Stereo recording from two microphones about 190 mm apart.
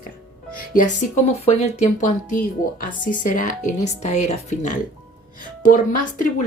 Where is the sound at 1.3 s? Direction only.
35° left (ahead or behind).